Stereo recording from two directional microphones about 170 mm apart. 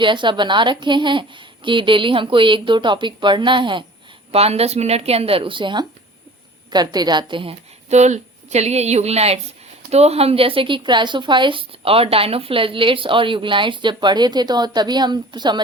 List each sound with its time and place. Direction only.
0.0 s a woman's voice: 30° right (ahead or behind)